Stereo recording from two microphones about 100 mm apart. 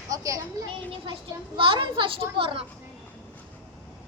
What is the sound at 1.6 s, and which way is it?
A child's voice, 55° right (ahead or behind).